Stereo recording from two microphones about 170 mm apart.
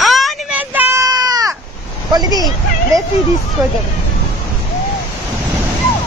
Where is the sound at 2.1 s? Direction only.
25° right (ahead or behind).